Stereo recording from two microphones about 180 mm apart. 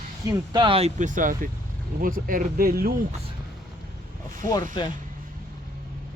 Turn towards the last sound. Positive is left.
turn(degrees=25)  # may be behind; listen again after turning